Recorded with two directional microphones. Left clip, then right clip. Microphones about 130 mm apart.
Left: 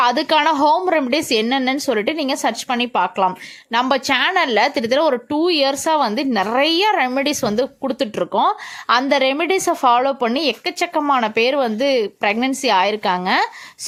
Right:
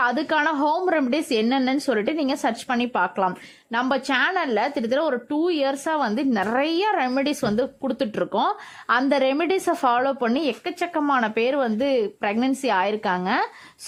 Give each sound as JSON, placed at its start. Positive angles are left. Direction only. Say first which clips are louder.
{"t": 0.0, "sound": "a woman's voice", "louder": "left 6 dB", "side_deg": 25}